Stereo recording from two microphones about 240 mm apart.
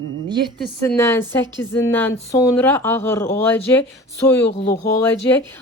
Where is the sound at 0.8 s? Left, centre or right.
Centre.